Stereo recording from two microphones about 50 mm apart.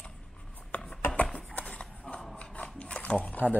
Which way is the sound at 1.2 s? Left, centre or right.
Left.